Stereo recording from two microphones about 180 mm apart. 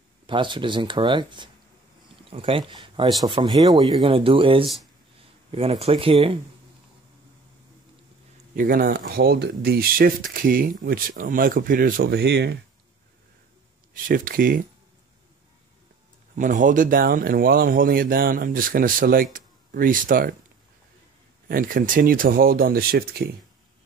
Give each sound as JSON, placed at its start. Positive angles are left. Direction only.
{"t": 0.3, "sound": "speech", "side_deg": -25}
{"t": 8.5, "sound": "speech", "side_deg": -50}
{"t": 14.0, "sound": "speech", "side_deg": -50}
{"t": 16.3, "sound": "speech", "side_deg": -45}
{"t": 21.5, "sound": "speech", "side_deg": -50}